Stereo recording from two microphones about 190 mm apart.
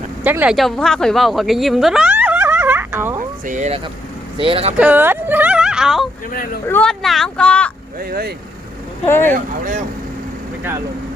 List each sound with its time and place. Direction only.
0.3 s speech: 5° right (ahead or behind)
3.4 s speech: 40° right (ahead or behind)
4.4 s speech: 30° right (ahead or behind)
4.8 s speech: 10° right (ahead or behind)
6.3 s speech: 50° left (ahead or behind)
6.7 s speech: 5° left (ahead or behind)
7.9 s speech: 55° right (ahead or behind)
9.0 s speech: 10° left (ahead or behind)
9.3 s speech: 40° right (ahead or behind)
10.6 s speech: 10° right (ahead or behind)